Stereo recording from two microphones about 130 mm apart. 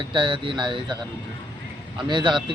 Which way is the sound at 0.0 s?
40° right (ahead or behind).